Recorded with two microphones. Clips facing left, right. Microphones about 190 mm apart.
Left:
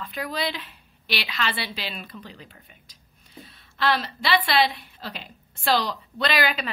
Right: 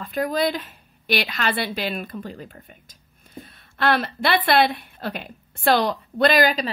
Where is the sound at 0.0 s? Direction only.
45° right (ahead or behind).